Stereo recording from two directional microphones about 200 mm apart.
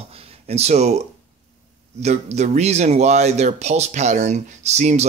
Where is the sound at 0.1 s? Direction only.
30° right (ahead or behind).